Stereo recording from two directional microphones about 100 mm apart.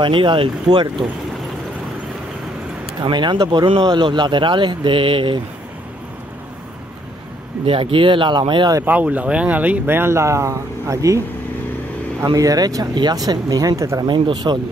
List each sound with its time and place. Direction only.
0.0 s speech: 55° right (ahead or behind)
3.0 s speech: 50° right (ahead or behind)
7.6 s speech: 65° right (ahead or behind); by 8.7 s 50° right (ahead or behind)
8.8 s speech: 15° right (ahead or behind); by 11.2 s 35° right (ahead or behind)
12.3 s speech: 40° right (ahead or behind)
14.0 s speech: 50° right (ahead or behind)